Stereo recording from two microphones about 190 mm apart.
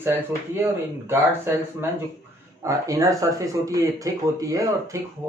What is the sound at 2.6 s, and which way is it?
Speech, 15° right (ahead or behind).